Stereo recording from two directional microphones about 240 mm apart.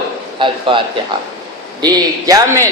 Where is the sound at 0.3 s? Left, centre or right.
Centre.